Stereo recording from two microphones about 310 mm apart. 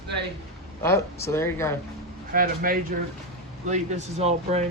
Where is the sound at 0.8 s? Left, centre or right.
Centre.